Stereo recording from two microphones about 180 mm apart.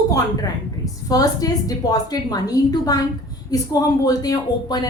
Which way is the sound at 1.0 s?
20° left (ahead or behind).